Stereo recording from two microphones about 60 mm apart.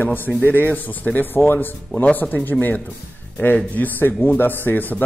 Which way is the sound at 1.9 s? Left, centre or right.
Left.